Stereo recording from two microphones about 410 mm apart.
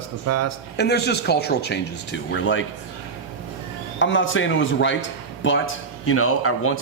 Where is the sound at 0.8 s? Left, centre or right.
Left.